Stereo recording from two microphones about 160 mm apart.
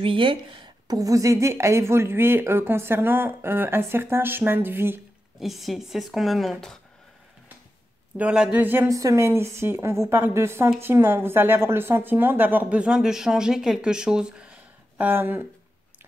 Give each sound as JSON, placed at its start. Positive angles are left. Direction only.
{"t": 0.0, "sound": "a woman's voice", "side_deg": -30}
{"t": 5.4, "sound": "speech", "side_deg": 0}
{"t": 8.2, "sound": "a woman's voice", "side_deg": -5}